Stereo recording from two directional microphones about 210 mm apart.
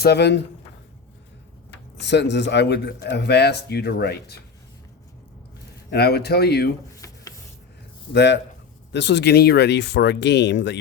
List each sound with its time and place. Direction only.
0.0 s a man's voice: 50° left (ahead or behind)
2.0 s a man's voice: 55° left (ahead or behind)
5.9 s a man's voice: 50° left (ahead or behind)
6.9 s a sound: 15° left (ahead or behind)
8.1 s speech: 55° left (ahead or behind)